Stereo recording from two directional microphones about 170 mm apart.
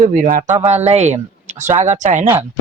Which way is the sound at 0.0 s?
50° right (ahead or behind).